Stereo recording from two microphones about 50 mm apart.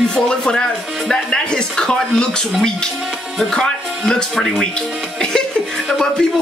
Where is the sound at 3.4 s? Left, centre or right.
Centre.